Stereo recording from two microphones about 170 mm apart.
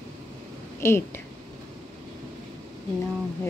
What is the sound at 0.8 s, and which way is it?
Speech, 15° left (ahead or behind).